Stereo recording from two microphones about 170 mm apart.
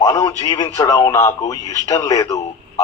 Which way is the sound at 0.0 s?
20° left (ahead or behind).